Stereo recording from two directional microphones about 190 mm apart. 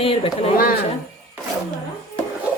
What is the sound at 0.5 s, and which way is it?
Speech, 50° left (ahead or behind).